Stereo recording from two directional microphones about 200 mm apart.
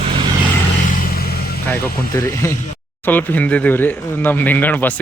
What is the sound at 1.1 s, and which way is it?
Vehicle, 50° left (ahead or behind).